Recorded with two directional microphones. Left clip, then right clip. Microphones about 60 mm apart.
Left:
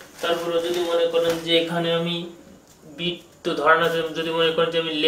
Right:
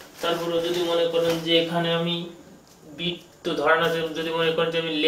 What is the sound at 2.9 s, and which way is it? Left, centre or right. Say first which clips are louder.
Speech: left 2 dB; left.